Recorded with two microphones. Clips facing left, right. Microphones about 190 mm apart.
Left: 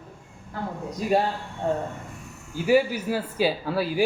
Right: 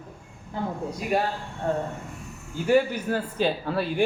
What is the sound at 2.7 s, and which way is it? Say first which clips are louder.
A man's voice: left 1 dB; 5° left (ahead or behind).